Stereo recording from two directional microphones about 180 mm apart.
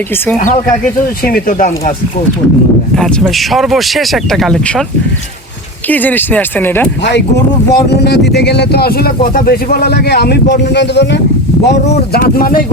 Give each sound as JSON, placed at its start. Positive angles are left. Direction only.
{"t": 1.2, "sound": "speech", "side_deg": 55}
{"t": 2.9, "sound": "speech", "side_deg": 5}
{"t": 5.9, "sound": "speech", "side_deg": 10}
{"t": 7.7, "sound": "speech", "side_deg": 65}
{"t": 12.1, "sound": "speech", "side_deg": 50}